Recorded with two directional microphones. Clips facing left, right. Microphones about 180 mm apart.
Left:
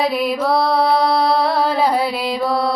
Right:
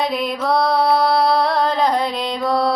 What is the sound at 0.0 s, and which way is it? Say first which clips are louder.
Music: left 3 dB; 5° left (ahead or behind).